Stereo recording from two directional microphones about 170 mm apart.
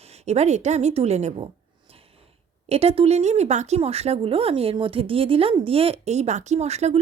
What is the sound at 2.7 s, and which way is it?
Speech, 35° right (ahead or behind).